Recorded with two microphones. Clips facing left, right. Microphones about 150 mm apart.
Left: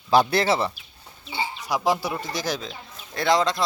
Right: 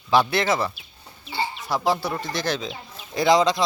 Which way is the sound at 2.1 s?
10° left (ahead or behind).